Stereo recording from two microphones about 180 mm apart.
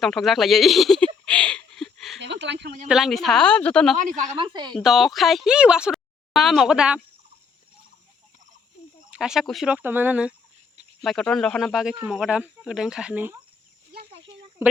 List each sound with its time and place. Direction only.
0.0 s a sound: centre (ahead or behind)
2.1 s a sound: 75° right (ahead or behind)
2.9 s speech: centre (ahead or behind)
3.9 s a woman's voice: 45° right (ahead or behind)
4.4 s speech: 25° right (ahead or behind)
4.8 s speech: centre (ahead or behind)
9.0 s speech: 5° right (ahead or behind)
14.6 s speech: 15° right (ahead or behind)